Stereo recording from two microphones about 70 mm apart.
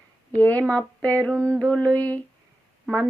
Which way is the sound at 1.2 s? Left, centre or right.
Centre.